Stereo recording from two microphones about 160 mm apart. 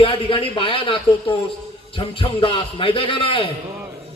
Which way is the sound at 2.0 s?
35° left (ahead or behind).